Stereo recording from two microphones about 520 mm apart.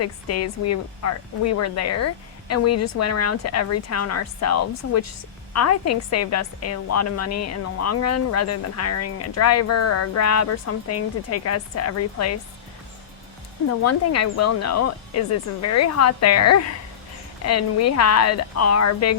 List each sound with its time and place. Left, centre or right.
0.0 s a woman's voice: left
13.7 s a woman's voice: left